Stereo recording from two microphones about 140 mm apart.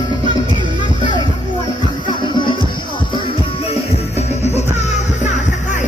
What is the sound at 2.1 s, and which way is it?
Music, 35° left (ahead or behind).